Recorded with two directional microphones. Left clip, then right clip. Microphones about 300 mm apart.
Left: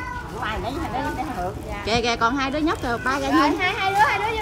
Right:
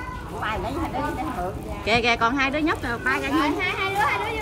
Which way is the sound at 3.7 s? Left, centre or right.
Left.